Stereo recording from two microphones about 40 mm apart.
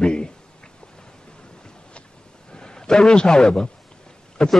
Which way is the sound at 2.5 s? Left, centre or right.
Left.